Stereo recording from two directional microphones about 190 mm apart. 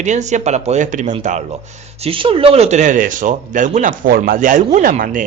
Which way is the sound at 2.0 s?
30° right (ahead or behind).